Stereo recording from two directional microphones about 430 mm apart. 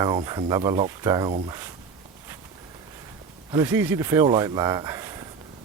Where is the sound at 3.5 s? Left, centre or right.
Centre.